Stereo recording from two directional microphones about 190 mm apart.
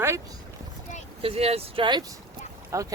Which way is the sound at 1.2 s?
30° right (ahead or behind).